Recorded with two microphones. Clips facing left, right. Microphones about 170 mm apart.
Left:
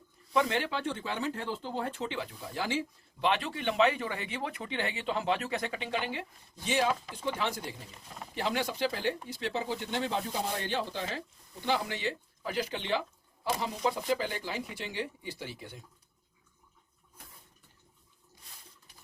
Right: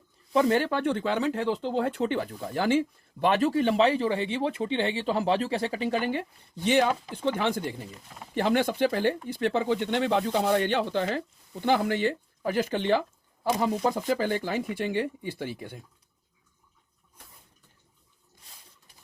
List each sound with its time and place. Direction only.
0.3 s speech: 40° right (ahead or behind)
0.8 s speech: 60° right (ahead or behind)
7.3 s speech: 55° right (ahead or behind)